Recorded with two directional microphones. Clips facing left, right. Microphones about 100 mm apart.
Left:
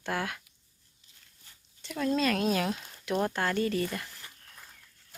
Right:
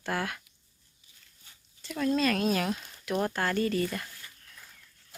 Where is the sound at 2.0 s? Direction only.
20° left (ahead or behind).